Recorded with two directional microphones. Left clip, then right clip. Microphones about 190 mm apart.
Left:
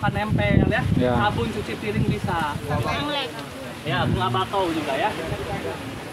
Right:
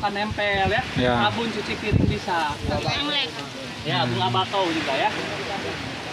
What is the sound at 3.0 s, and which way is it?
Speech, 50° left (ahead or behind).